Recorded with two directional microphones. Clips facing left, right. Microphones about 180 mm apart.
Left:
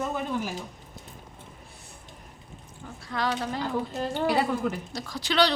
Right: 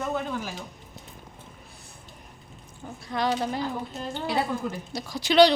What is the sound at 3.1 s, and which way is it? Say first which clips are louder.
Speech: right 3 dB; 15° right (ahead or behind).